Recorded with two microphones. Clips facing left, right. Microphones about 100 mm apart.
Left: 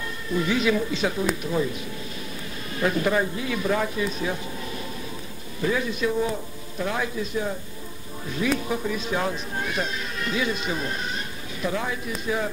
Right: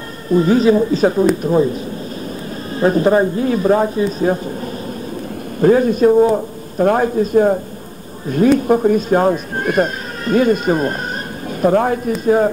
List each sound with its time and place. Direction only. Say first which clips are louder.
0.3 s speech: right 11 dB; 40° right (ahead or behind)
5.6 s speech: right 13 dB; 45° right (ahead or behind)